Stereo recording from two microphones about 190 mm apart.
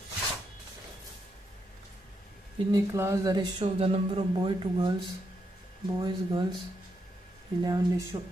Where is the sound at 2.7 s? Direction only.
15° right (ahead or behind).